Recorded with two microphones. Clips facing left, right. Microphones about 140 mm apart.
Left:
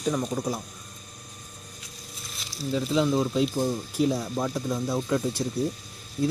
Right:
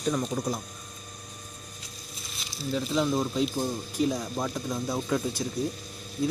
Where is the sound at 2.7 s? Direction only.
Centre (ahead or behind).